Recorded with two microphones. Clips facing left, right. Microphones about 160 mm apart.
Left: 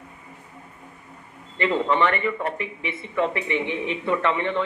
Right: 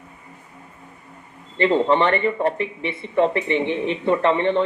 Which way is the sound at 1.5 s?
30° right (ahead or behind).